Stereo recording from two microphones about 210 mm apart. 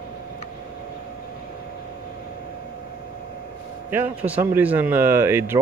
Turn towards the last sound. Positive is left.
turn(degrees=-10)  # may be behind; listen again after turning